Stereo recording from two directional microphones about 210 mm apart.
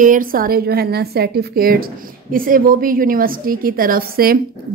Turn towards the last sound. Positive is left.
turn(degrees=-45)  # may be behind; listen again after turning